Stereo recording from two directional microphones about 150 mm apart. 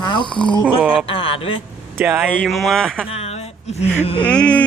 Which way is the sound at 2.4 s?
Centre (ahead or behind).